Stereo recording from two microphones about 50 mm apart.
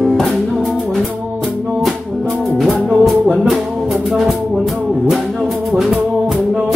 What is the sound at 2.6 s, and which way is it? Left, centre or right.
Music, centre.